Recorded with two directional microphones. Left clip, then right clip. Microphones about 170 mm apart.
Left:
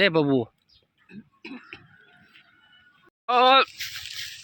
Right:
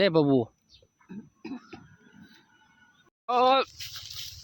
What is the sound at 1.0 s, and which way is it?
Cough, 65° right (ahead or behind).